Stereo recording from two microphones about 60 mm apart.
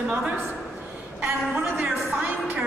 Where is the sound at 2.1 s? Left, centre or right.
Right.